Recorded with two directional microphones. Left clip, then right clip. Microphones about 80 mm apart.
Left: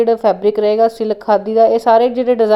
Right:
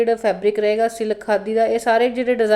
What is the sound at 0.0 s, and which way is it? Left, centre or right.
A woman's voice, left.